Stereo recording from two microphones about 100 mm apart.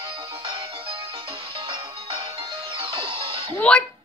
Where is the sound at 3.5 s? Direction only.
10° left (ahead or behind).